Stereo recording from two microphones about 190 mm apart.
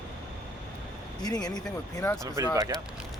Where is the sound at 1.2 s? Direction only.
20° left (ahead or behind).